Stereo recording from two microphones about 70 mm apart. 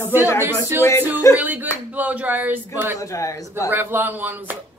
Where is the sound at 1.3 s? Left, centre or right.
Right.